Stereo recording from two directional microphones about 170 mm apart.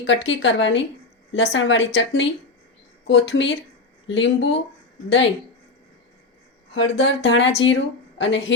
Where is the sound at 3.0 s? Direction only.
90° left.